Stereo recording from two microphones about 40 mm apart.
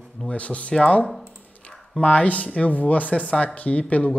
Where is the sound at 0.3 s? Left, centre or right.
Left.